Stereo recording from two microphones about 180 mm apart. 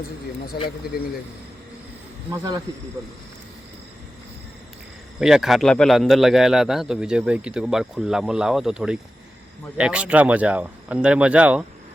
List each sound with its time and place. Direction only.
2.3 s speech: 20° right (ahead or behind)
5.2 s a man's voice: centre (ahead or behind)